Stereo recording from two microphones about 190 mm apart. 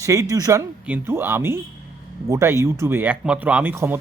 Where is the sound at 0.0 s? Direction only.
15° right (ahead or behind).